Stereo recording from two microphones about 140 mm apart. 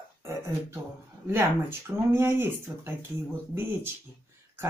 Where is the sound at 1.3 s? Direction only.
15° right (ahead or behind).